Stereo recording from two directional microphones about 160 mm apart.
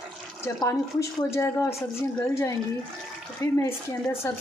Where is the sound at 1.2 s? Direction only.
15° left (ahead or behind).